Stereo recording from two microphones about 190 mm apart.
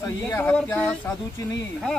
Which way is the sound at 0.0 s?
15° left (ahead or behind).